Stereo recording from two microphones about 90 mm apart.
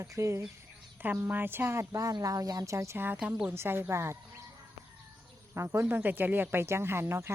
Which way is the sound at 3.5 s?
25° right (ahead or behind).